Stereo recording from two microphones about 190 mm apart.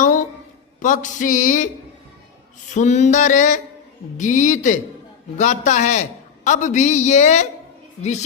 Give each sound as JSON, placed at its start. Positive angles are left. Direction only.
{"t": 0.0, "sound": "a sound", "side_deg": 40}
{"t": 0.8, "sound": "a man's voice", "side_deg": 40}
{"t": 2.7, "sound": "a man's voice", "side_deg": 35}